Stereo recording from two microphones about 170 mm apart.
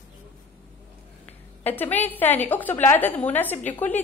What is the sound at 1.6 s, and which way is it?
A woman's voice, 10° left (ahead or behind).